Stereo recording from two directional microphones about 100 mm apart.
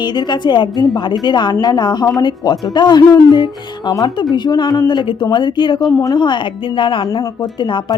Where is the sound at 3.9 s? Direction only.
35° left (ahead or behind).